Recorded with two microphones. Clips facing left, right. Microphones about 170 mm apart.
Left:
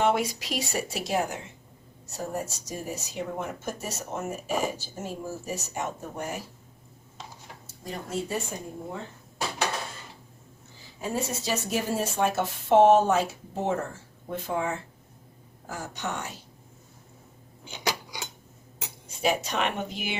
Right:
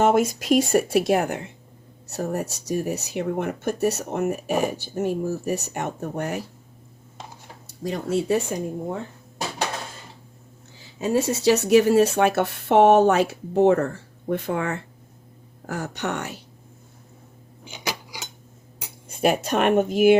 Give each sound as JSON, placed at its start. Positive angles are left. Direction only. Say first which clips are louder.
{"t": 0.0, "sound": "speech", "louder": "right 6 dB", "side_deg": -45}
{"t": 7.9, "sound": "speech", "louder": "right 9 dB", "side_deg": -75}
{"t": 11.0, "sound": "speech", "louder": "right 10 dB", "side_deg": -80}
{"t": 17.7, "sound": "cutlery", "louder": "even", "side_deg": -15}
{"t": 19.0, "sound": "speech", "louder": "right 5 dB", "side_deg": -55}